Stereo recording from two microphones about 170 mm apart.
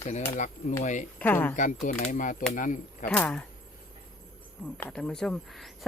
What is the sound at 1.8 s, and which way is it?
Speech, 45° left (ahead or behind).